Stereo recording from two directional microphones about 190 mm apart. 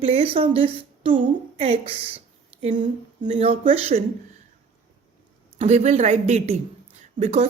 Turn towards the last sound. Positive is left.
turn(degrees=-35)  # may be behind; listen again after turning